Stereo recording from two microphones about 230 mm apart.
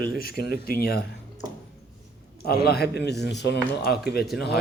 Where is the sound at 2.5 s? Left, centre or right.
Left.